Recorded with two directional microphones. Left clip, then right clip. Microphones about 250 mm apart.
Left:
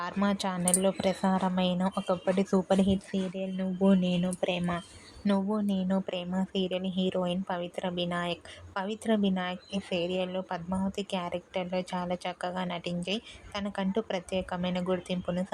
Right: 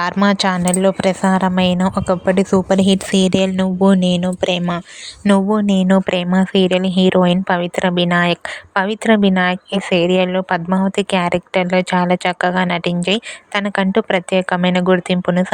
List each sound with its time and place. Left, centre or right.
0.0 s a woman's voice: right